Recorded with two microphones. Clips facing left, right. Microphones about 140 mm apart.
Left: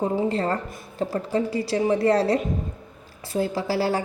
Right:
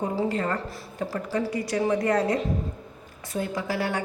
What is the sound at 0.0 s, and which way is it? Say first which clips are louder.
A woman's voice: left 3 dB; 30° left (ahead or behind).